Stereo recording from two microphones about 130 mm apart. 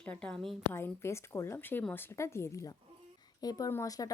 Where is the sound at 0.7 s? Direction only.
20° left (ahead or behind).